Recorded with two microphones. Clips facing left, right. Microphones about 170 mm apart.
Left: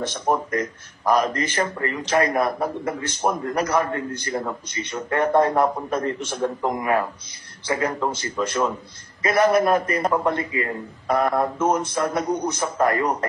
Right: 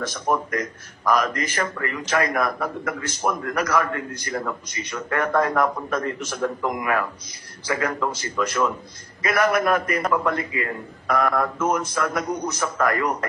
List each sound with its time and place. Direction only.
0.3 s a man's voice: 30° left (ahead or behind)